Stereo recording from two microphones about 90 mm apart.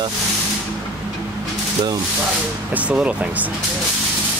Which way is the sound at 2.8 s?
15° right (ahead or behind).